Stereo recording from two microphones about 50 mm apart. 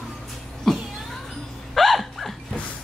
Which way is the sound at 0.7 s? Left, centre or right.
Centre.